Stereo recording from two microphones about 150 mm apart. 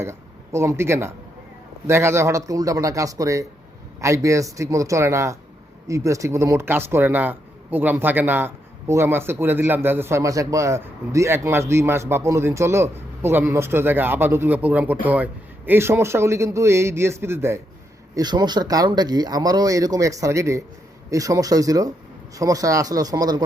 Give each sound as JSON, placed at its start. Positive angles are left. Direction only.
{"t": 0.0, "sound": "a man's voice", "side_deg": -15}
{"t": 18.1, "sound": "speech", "side_deg": -25}